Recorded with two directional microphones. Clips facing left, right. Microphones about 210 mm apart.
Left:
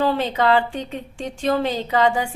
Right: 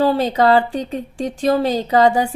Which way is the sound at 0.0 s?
40° right (ahead or behind).